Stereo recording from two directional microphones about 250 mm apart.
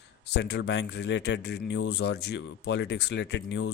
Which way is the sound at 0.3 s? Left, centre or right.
Left.